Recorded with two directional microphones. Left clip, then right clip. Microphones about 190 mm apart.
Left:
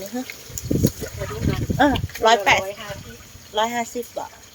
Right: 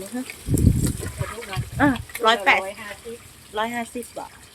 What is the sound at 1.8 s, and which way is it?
A woman's voice, 5° left (ahead or behind).